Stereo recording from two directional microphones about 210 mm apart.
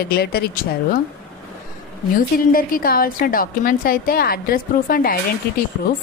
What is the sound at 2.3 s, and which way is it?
A woman's voice, 45° left (ahead or behind).